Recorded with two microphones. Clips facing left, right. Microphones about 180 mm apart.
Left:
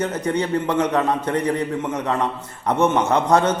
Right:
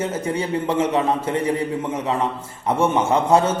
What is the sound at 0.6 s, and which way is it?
Speech, 25° right (ahead or behind).